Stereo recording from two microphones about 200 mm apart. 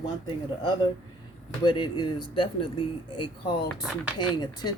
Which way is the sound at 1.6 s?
20° left (ahead or behind).